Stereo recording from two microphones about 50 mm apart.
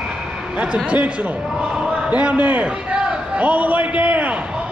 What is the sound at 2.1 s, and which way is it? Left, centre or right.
A man's voice, right.